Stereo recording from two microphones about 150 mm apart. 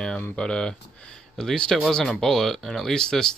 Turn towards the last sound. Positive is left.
turn(degrees=5)  # may be behind; listen again after turning